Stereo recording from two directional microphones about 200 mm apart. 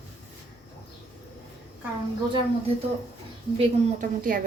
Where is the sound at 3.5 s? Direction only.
40° right (ahead or behind).